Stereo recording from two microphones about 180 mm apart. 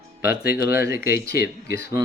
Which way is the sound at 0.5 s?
15° right (ahead or behind).